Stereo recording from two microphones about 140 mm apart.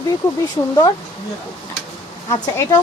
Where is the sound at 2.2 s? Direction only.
20° left (ahead or behind).